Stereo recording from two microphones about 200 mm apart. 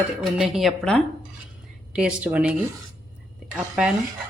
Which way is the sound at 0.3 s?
Centre (ahead or behind).